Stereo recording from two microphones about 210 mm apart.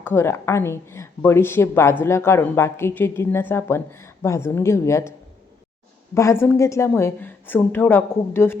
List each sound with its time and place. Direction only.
0.0 s a woman's voice: 10° left (ahead or behind)
6.1 s a woman's voice: 15° left (ahead or behind)